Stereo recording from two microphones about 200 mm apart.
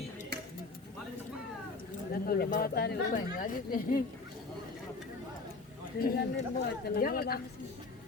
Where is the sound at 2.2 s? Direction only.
50° left (ahead or behind).